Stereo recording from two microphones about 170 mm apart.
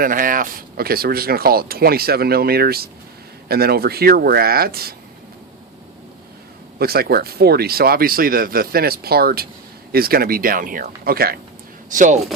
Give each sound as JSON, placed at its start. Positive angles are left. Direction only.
{"t": 0.0, "sound": "speech", "side_deg": -55}
{"t": 6.7, "sound": "speech", "side_deg": -65}
{"t": 11.9, "sound": "speech", "side_deg": -45}